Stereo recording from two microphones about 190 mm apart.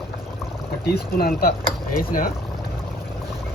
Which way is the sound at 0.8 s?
55° left (ahead or behind).